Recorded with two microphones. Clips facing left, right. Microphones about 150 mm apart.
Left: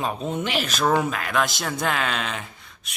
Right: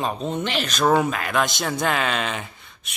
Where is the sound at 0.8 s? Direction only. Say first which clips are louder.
Right 3 dB; 5° right (ahead or behind).